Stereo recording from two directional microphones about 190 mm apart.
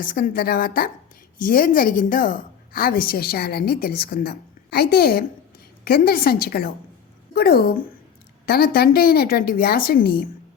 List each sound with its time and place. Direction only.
0.0 s a woman's voice: 45° left (ahead or behind)